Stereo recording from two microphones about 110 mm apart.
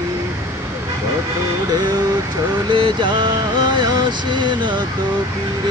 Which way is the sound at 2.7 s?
50° right (ahead or behind).